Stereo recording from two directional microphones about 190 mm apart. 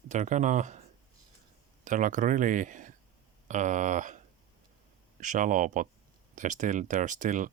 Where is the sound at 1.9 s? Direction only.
40° right (ahead or behind).